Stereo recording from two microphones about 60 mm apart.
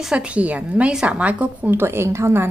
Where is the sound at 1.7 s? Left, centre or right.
Right.